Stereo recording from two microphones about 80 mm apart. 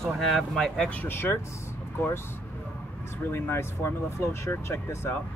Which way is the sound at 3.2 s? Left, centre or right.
Left.